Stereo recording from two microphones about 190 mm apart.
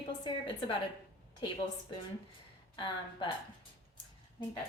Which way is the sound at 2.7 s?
25° left (ahead or behind).